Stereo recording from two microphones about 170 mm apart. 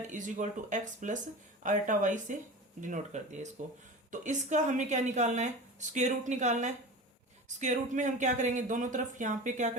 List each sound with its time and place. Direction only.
0.1 s a woman's voice: 50° right (ahead or behind)